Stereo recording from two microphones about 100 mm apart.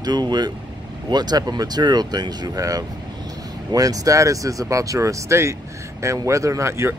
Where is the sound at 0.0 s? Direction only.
45° right (ahead or behind).